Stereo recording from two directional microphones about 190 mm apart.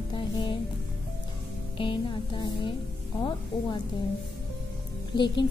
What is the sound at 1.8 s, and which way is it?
Speech, 25° left (ahead or behind).